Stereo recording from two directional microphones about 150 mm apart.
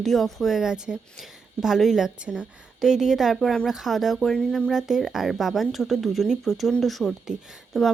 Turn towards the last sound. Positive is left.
turn(degrees=0)  # may be behind; listen again after turning